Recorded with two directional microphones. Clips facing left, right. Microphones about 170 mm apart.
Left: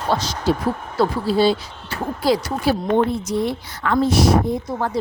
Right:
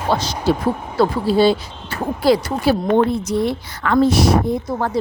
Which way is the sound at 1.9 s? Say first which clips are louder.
Right 3 dB; 60° right (ahead or behind).